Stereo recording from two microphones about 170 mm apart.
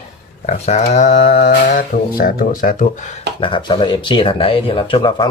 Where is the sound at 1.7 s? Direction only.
60° left (ahead or behind).